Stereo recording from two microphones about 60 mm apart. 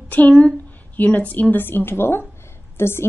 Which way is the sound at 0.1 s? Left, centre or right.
Left.